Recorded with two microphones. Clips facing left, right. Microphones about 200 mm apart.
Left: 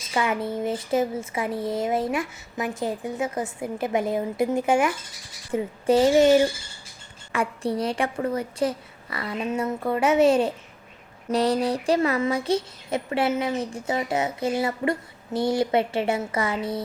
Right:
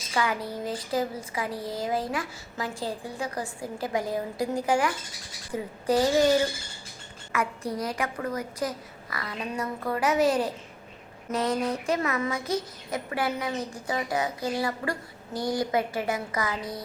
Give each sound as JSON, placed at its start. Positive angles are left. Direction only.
{"t": 0.1, "sound": "a woman's voice", "side_deg": 25}
{"t": 7.3, "sound": "a woman's voice", "side_deg": 30}